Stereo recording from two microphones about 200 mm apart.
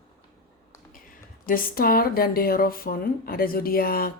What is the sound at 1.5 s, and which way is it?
Speech, 45° left (ahead or behind).